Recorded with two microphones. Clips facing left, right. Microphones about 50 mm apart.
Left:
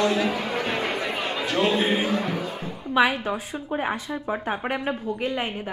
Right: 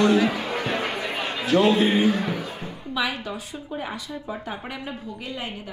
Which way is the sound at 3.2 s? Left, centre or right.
Left.